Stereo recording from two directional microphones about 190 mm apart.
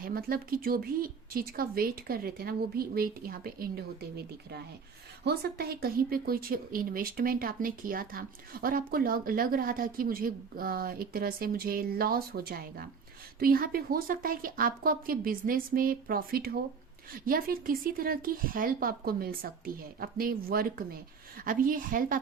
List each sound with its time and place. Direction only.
0.0 s a woman's voice: 50° right (ahead or behind)
5.2 s a woman's voice: 55° right (ahead or behind)